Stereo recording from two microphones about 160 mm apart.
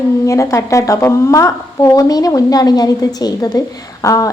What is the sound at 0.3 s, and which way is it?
Speech, 20° left (ahead or behind).